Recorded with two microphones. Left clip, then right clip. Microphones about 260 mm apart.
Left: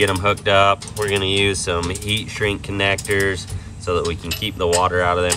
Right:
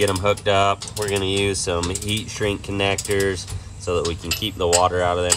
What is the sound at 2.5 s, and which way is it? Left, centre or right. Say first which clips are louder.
Mechanisms: left 2 dB; centre.